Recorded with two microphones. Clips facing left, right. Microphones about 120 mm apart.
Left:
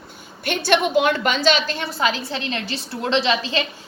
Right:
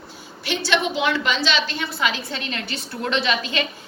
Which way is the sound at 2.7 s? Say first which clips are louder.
Left 3 dB; 30° left (ahead or behind).